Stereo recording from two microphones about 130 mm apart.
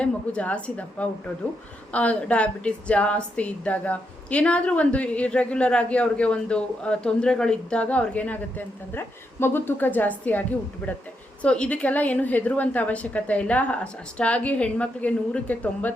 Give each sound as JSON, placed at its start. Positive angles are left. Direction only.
{"t": 0.0, "sound": "a woman's voice", "side_deg": 10}